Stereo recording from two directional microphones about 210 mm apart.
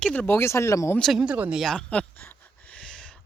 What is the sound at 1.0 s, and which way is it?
Speech, centre (ahead or behind).